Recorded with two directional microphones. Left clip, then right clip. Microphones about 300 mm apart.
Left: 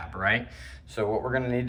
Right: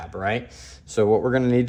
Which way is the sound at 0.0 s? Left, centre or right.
Centre.